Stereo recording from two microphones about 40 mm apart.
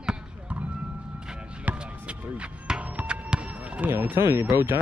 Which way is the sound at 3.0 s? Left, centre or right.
Right.